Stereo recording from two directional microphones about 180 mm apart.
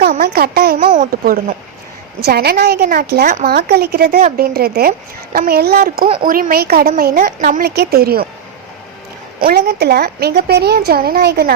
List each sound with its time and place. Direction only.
0.0 s a sound: 55° right (ahead or behind)
0.9 s a woman's voice: 55° right (ahead or behind)
9.4 s a woman's voice: 55° right (ahead or behind)